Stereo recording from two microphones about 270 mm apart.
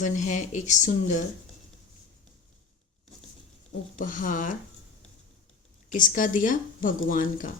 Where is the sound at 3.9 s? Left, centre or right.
Left.